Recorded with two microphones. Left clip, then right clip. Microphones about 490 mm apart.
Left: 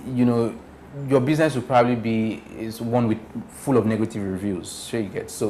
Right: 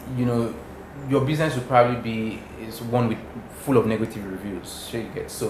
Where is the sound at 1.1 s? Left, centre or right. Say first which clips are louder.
Left 3 dB; left.